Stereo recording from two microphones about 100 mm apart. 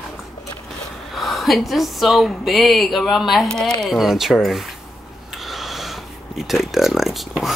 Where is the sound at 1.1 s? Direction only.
Centre (ahead or behind).